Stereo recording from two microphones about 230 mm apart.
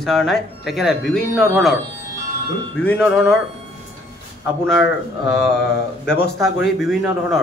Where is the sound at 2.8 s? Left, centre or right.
Centre.